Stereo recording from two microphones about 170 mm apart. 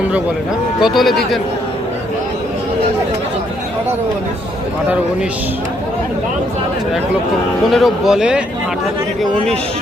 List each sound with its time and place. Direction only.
0.8 s speech: centre (ahead or behind)
7.7 s speech: centre (ahead or behind)